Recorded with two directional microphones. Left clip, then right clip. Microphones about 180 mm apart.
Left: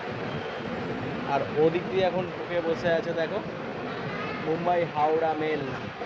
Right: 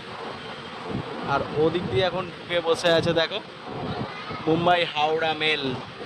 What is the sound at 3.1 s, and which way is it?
Speech, 35° right (ahead or behind).